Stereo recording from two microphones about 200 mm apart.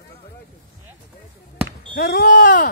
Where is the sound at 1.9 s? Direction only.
50° left (ahead or behind).